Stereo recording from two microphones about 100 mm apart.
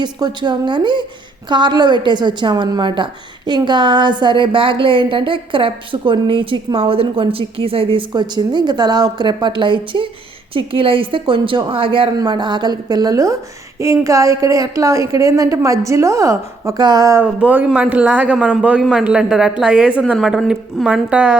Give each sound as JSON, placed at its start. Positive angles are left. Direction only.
{"t": 0.0, "sound": "a woman's voice", "side_deg": -50}
{"t": 8.1, "sound": "a woman's voice", "side_deg": -50}
{"t": 12.2, "sound": "a woman's voice", "side_deg": -45}
{"t": 17.2, "sound": "a woman's voice", "side_deg": -15}